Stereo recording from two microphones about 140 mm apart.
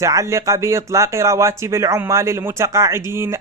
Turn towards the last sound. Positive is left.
turn(degrees=-20)  # may be behind; listen again after turning